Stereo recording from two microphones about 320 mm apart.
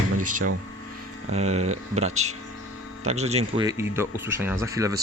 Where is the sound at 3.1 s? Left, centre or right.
Centre.